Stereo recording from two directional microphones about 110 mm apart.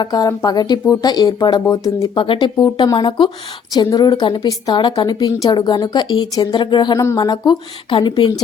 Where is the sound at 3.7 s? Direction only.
35° left (ahead or behind).